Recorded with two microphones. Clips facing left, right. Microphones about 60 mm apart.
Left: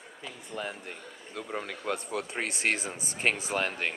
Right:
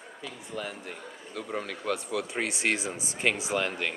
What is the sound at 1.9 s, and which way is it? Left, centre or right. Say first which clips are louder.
Speech: right 2 dB; left.